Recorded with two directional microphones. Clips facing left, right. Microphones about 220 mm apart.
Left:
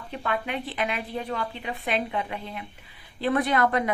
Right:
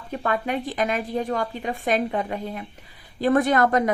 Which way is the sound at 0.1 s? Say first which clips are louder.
Right 5 dB; 45° right (ahead or behind).